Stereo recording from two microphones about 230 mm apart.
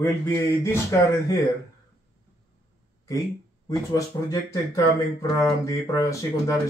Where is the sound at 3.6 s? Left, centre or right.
Centre.